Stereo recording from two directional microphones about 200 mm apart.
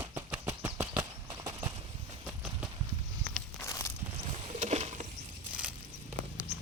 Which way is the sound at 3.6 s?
15° left (ahead or behind).